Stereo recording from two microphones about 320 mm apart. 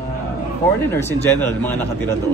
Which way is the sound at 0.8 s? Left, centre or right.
Centre.